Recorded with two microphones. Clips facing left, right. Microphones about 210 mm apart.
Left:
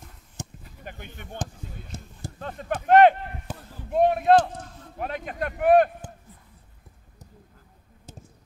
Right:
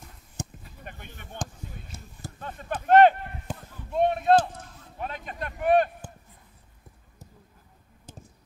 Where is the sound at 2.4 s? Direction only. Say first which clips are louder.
Left 4 dB; 40° left (ahead or behind).